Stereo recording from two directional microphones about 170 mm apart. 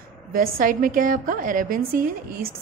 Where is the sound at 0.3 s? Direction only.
55° right (ahead or behind).